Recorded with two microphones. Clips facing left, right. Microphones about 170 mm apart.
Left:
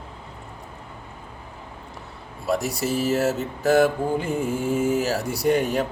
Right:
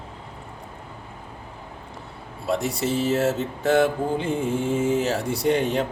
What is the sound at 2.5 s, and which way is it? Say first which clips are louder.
Mantra: even; 30° right (ahead or behind).